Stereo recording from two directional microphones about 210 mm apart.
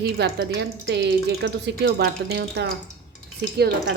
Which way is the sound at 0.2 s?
55° right (ahead or behind).